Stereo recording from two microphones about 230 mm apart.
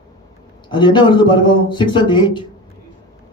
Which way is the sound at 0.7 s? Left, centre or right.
Left.